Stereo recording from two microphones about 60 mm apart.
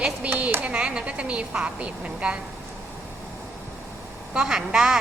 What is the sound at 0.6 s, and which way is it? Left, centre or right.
Speech, centre.